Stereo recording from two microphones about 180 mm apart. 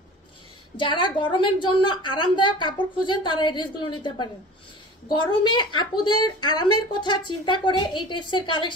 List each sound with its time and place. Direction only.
0.7 s a woman's voice: 25° left (ahead or behind)